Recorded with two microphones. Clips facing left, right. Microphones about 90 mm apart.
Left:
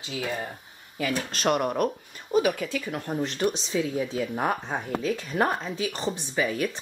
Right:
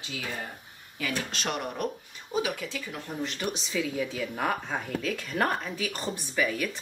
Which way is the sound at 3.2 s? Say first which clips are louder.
Left 7 dB; 35° left (ahead or behind).